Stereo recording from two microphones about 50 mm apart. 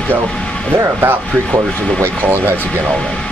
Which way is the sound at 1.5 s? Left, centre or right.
Right.